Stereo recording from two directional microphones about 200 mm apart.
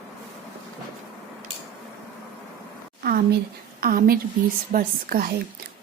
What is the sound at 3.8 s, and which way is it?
Speech, 45° right (ahead or behind).